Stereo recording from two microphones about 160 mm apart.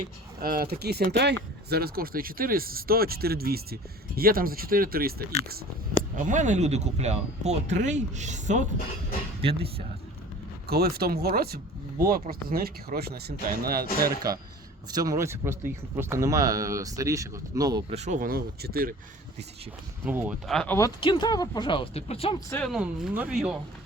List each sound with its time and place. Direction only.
0.4 s speech: 70° right (ahead or behind); by 1.4 s 90° right
1.7 s speech: 70° right (ahead or behind); by 8.6 s 50° right (ahead or behind)
9.4 s speech: 35° right (ahead or behind)
10.7 s speech: 75° right (ahead or behind)
14.8 s speech: 25° right (ahead or behind)
17.8 s speech: 45° right (ahead or behind)
18.3 s speech: 70° right (ahead or behind)
20.1 s speech: 10° right (ahead or behind)
20.5 s speech: 5° left (ahead or behind)
21.0 s speech: 30° left (ahead or behind)
22.6 s speech: centre (ahead or behind)